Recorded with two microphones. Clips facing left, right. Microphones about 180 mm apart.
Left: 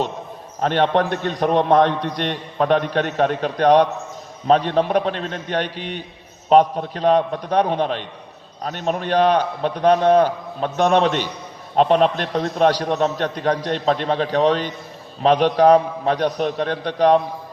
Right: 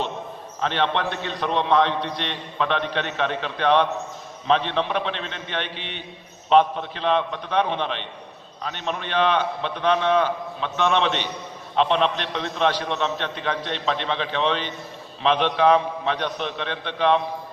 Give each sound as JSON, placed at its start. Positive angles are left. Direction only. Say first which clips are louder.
{"t": 0.6, "sound": "a man's voice", "louder": "left 6 dB", "side_deg": 45}